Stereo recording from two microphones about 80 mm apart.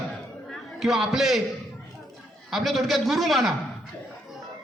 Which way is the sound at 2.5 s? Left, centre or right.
Centre.